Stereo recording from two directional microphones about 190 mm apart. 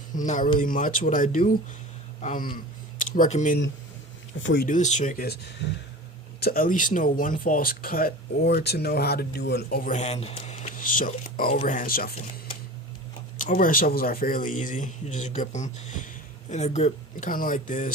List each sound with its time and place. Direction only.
0.1 s speech: 40° left (ahead or behind)
4.6 s speech: 40° left (ahead or behind); by 9.6 s 60° left (ahead or behind)
9.6 s speech: 45° left (ahead or behind)
13.4 s speech: 45° left (ahead or behind)